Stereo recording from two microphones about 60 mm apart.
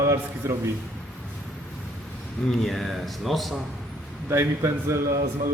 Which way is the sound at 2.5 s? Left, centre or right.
Centre.